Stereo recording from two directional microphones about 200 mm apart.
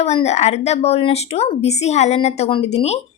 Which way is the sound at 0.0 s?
30° left (ahead or behind).